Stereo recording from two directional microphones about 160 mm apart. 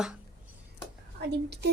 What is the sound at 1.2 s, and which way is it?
Speech, 90° right.